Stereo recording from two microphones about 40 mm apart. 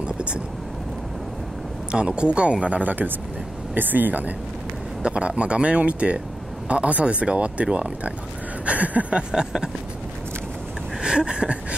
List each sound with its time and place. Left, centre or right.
0.0 s vehicle: right
1.9 s speech: right
5.0 s speech: right
8.6 s a sound: right
9.3 s speech: centre
11.0 s a sound: centre